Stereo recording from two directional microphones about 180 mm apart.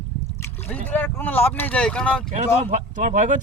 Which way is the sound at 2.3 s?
40° right (ahead or behind).